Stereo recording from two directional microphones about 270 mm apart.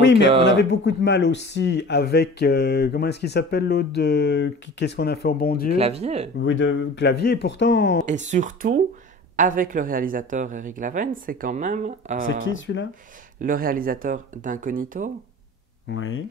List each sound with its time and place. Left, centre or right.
0.0 s a sound: left
0.5 s speech: left
5.8 s speech: right
6.4 s speech: left
8.1 s speech: right
12.4 s speech: left
13.4 s speech: right
15.9 s speech: left